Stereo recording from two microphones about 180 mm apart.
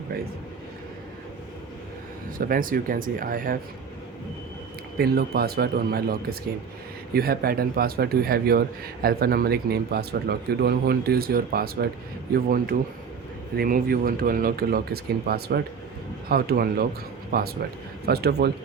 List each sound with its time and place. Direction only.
2.4 s speech: 50° right (ahead or behind)
4.9 s speech: 60° right (ahead or behind)